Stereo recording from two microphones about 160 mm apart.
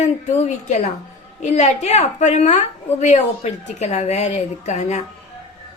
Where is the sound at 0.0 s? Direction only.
45° left (ahead or behind).